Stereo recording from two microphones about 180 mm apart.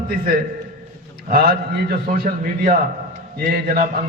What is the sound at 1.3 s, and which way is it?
A man's voice, 55° right (ahead or behind).